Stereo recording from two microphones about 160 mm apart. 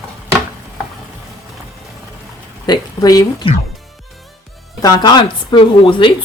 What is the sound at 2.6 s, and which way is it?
Speech, 25° left (ahead or behind).